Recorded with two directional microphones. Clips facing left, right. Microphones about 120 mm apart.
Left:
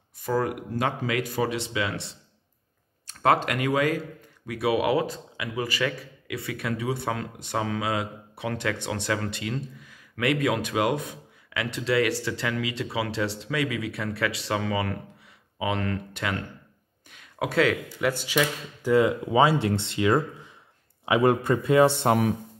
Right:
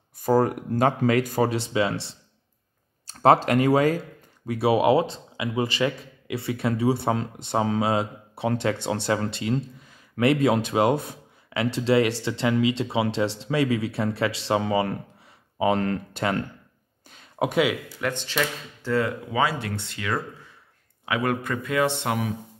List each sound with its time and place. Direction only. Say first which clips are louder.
0.2 s a man's voice: right 5 dB; 40° right (ahead or behind)
17.1 s a sound: right 4 dB; 30° right (ahead or behind)
17.5 s speech: left 1 dB; 10° right (ahead or behind)
18.0 s speech: left 2 dB; 10° left (ahead or behind); by 21.9 s 30° left (ahead or behind)
21.9 s speech: left 5 dB; 40° left (ahead or behind)